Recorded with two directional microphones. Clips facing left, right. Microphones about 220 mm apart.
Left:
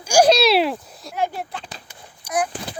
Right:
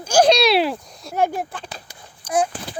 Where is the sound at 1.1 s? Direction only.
45° right (ahead or behind).